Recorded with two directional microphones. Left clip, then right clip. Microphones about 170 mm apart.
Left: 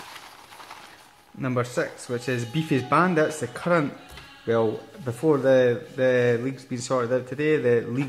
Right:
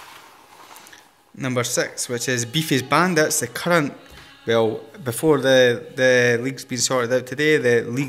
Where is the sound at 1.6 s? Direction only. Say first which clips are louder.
Right 4 dB; 10° right (ahead or behind).